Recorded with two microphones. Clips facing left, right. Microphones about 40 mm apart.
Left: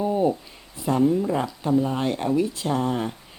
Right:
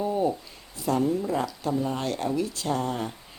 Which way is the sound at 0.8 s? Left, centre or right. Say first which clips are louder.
Left 4 dB; centre.